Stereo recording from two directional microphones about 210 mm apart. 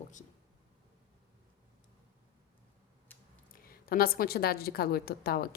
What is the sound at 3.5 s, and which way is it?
A woman's voice, 45° left (ahead or behind).